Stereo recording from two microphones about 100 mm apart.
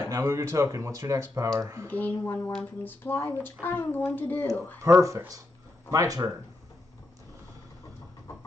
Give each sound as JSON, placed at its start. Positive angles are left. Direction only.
{"t": 0.1, "sound": "speech", "side_deg": -30}
{"t": 1.9, "sound": "speech", "side_deg": 20}
{"t": 4.8, "sound": "speech", "side_deg": -30}